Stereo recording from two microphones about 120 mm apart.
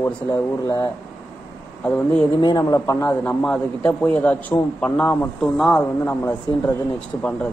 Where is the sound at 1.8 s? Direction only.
10° left (ahead or behind).